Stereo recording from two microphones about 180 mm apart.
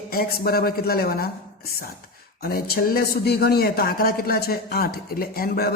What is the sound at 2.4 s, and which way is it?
A man's voice, 55° left (ahead or behind).